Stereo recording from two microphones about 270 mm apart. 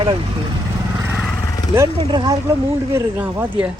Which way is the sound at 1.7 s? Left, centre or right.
Centre.